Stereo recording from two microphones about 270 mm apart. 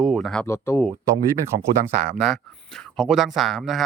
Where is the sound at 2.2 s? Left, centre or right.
Centre.